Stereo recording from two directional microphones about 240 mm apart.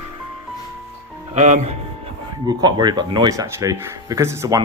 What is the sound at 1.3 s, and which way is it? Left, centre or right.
Speech, right.